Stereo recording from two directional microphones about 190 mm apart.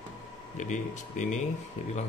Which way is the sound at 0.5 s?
40° left (ahead or behind).